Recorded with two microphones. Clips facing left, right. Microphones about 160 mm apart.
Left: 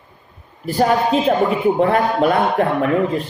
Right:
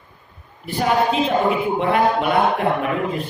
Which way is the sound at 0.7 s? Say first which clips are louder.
Left 3 dB; 40° left (ahead or behind).